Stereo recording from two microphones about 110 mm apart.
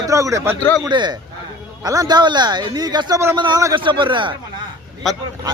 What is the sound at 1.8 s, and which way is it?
Speech, 35° right (ahead or behind).